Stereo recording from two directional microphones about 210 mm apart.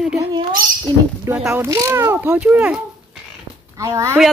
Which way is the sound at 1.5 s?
10° right (ahead or behind).